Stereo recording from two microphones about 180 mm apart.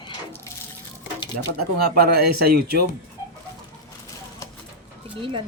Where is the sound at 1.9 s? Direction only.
60° right (ahead or behind).